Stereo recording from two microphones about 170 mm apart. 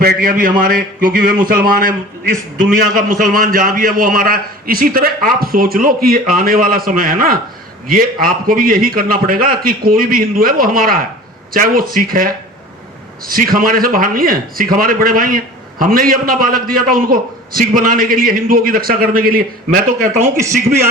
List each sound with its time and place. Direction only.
0.0 s a man's voice: 60° right (ahead or behind)